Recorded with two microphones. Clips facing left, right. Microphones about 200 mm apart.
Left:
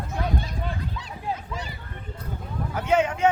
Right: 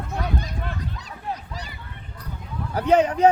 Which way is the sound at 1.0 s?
40° right (ahead or behind).